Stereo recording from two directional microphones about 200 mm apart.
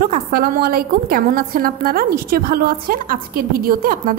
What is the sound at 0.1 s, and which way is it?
A woman's voice, 50° right (ahead or behind).